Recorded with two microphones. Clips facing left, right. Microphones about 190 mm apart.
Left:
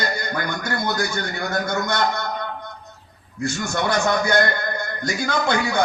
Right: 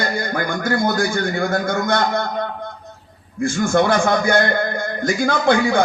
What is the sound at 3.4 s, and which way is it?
A man's voice, 50° right (ahead or behind).